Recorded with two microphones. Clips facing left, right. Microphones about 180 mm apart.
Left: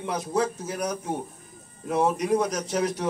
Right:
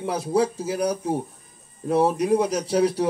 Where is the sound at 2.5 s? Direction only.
30° right (ahead or behind).